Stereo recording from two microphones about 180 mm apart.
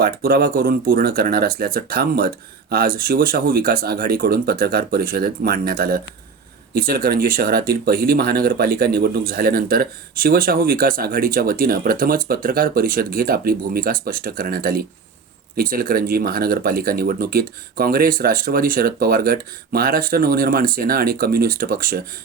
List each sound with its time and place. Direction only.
0.0 s speech: 55° right (ahead or behind)